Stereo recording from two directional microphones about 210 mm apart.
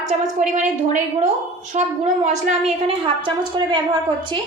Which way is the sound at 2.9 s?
25° right (ahead or behind).